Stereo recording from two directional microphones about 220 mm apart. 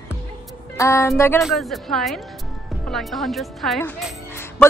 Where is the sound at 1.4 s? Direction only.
Centre (ahead or behind).